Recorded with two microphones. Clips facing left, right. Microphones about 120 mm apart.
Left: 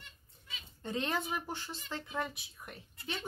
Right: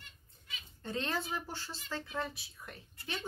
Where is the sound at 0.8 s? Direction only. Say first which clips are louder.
Left 2 dB; 15° left (ahead or behind).